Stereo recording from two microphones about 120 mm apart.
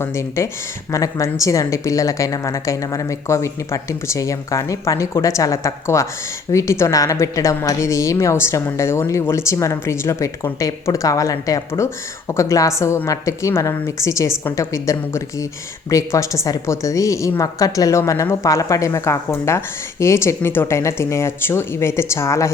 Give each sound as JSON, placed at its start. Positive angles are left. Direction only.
{"t": 0.0, "sound": "a woman's voice", "side_deg": 25}